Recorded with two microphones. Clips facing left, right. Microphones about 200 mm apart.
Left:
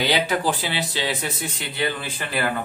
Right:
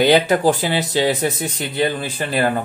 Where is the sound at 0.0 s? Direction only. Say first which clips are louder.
Right 8 dB; 50° right (ahead or behind).